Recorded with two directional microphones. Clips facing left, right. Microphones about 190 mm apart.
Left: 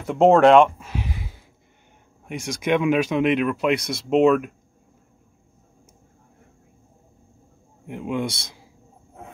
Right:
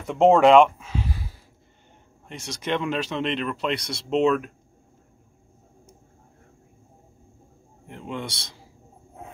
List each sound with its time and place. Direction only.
0.0 s speech: 5° left (ahead or behind)
0.3 s speech: 5° right (ahead or behind)
0.9 s a sound: 15° left (ahead or behind)
2.2 s speech: 10° left (ahead or behind)
7.8 s speech: 10° left (ahead or behind)